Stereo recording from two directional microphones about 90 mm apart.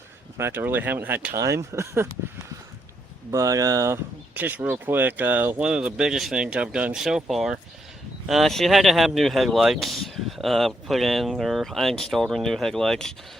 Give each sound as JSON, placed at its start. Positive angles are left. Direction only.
{"t": 0.3, "sound": "speech", "side_deg": -25}
{"t": 1.4, "sound": "speech", "side_deg": -35}
{"t": 3.3, "sound": "speech", "side_deg": -40}
{"t": 3.9, "sound": "speech", "side_deg": -20}
{"t": 5.6, "sound": "speech", "side_deg": -10}